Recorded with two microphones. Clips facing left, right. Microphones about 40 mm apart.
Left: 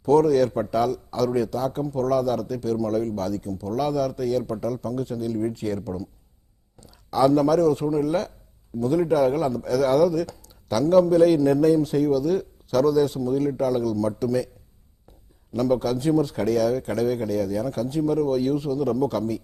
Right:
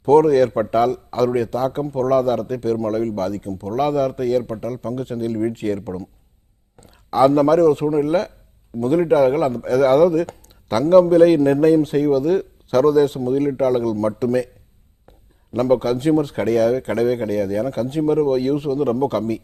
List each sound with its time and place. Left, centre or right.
0.0 s a man's voice: right
15.5 s a man's voice: right